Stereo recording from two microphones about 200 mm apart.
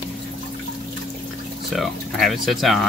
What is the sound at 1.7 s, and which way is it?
Speech, centre (ahead or behind).